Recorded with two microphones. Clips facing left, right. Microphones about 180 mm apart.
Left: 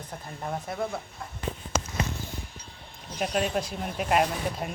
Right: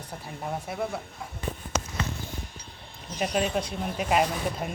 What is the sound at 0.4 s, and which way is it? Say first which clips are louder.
Speech: even; 5° right (ahead or behind).